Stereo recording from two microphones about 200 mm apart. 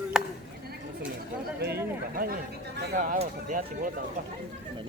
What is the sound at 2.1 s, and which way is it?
Chatter, 45° right (ahead or behind).